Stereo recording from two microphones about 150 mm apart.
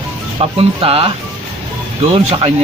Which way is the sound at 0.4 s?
40° right (ahead or behind).